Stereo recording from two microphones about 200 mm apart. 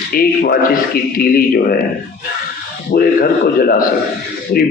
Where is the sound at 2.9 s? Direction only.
45° left (ahead or behind).